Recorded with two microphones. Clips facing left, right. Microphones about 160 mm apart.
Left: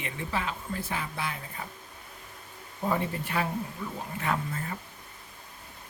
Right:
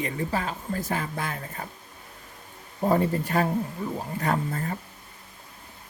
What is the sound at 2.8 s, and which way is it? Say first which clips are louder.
Speech: right 6 dB; 40° right (ahead or behind).